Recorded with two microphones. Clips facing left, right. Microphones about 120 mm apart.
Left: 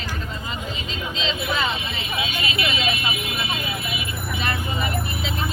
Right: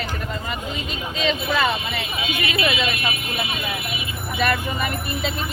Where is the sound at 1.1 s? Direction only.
60° right (ahead or behind).